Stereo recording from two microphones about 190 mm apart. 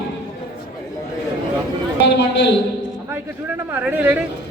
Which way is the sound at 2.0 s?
65° left (ahead or behind).